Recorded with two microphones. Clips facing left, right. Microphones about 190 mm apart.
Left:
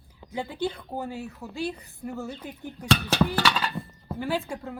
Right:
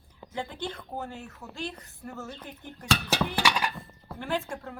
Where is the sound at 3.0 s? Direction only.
15° right (ahead or behind).